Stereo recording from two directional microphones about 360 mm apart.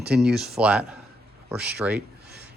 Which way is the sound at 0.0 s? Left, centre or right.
Centre.